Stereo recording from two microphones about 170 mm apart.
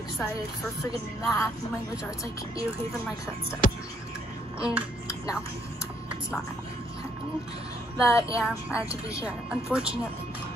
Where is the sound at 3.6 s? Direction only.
55° left (ahead or behind).